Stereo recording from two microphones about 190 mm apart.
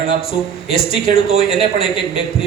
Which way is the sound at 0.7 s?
30° left (ahead or behind).